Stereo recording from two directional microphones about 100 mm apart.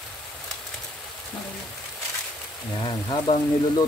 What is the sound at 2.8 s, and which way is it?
Speech, 50° left (ahead or behind).